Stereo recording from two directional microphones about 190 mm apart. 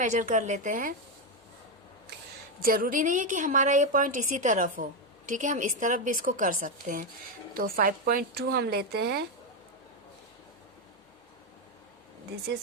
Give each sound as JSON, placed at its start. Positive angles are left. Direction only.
{"t": 0.0, "sound": "a woman's voice", "side_deg": -40}
{"t": 2.6, "sound": "a woman's voice", "side_deg": -50}